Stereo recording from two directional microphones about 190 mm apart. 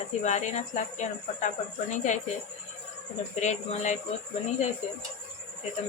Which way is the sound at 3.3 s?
40° left (ahead or behind).